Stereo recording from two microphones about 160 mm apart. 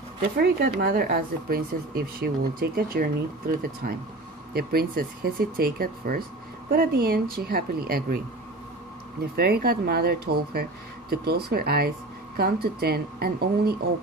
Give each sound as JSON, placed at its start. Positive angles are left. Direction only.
{"t": 0.2, "sound": "speech", "side_deg": -75}
{"t": 9.3, "sound": "speech", "side_deg": -75}